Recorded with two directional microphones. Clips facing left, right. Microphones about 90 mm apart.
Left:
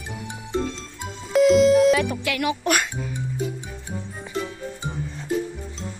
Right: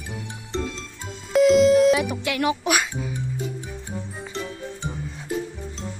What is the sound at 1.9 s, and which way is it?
Speech, 20° right (ahead or behind).